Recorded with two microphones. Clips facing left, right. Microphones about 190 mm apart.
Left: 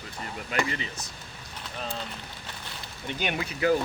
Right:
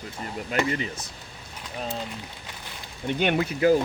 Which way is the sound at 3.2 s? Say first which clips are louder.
Right 6 dB; 55° right (ahead or behind).